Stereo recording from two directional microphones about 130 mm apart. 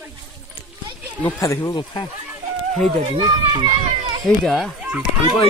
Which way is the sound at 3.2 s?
35° right (ahead or behind).